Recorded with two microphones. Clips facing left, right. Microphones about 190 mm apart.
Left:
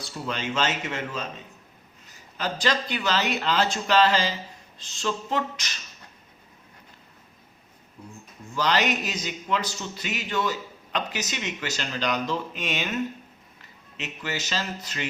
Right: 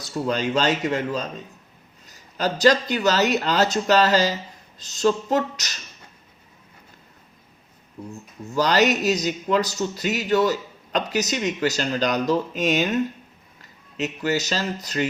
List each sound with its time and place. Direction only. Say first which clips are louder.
0.0 s a man's voice: right 7 dB; 40° right (ahead or behind)
8.5 s a man's voice: right 5 dB; 40° right (ahead or behind)